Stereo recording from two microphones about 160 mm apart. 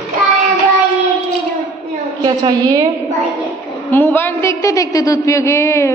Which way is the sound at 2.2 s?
25° right (ahead or behind).